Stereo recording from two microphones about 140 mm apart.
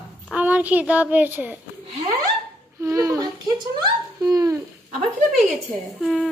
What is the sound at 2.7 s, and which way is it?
Speech, 20° right (ahead or behind).